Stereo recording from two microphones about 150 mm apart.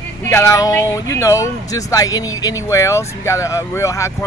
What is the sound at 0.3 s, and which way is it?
Speech, 20° left (ahead or behind).